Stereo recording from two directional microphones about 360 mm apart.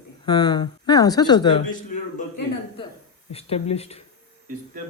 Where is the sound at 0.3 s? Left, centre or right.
Centre.